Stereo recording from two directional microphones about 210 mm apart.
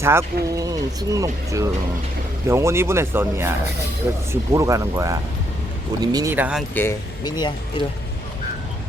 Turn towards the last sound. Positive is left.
turn(degrees=20)  # may be behind; listen again after turning